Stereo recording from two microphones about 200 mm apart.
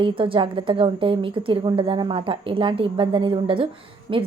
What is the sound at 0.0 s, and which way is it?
A woman's voice, 25° right (ahead or behind).